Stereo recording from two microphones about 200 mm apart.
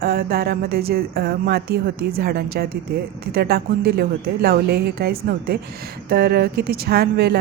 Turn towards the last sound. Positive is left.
turn(degrees=-50)  # may be behind; listen again after turning